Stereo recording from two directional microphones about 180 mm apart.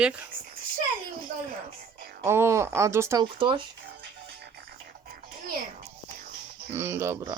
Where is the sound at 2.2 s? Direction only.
15° right (ahead or behind).